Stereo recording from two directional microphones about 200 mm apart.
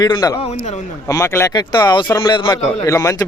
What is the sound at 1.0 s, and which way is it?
Speech, 15° left (ahead or behind).